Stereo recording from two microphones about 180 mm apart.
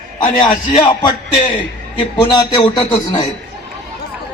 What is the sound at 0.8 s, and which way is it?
A man's voice, 25° left (ahead or behind).